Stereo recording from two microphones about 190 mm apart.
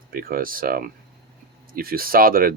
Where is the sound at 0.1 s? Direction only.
50° right (ahead or behind).